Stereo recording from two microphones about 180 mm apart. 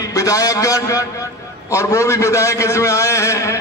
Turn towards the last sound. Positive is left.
turn(degrees=15)  # may be behind; listen again after turning